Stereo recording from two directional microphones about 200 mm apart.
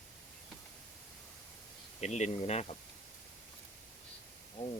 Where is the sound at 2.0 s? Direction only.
35° left (ahead or behind).